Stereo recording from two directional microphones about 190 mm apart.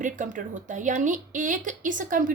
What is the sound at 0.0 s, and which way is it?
A woman's voice, 40° right (ahead or behind).